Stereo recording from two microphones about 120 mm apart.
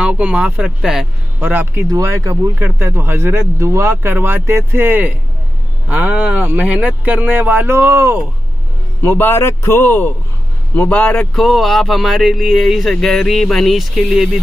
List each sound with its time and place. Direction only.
0.0 s speech: 10° right (ahead or behind)
1.9 s speech: 30° right (ahead or behind)
9.0 s a man's voice: 15° left (ahead or behind)
11.3 s speech: centre (ahead or behind)